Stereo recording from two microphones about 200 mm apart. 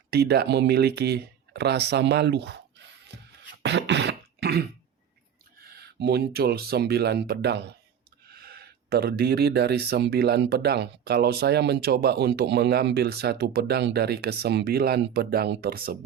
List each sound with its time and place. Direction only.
0.1 s speech: 55° right (ahead or behind)
3.1 s beatboxing: 60° right (ahead or behind)
5.6 s speech: 55° right (ahead or behind)